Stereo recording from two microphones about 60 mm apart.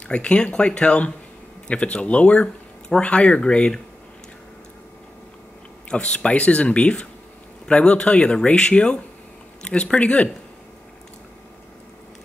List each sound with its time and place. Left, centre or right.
0.1 s speech: centre
5.9 s speech: centre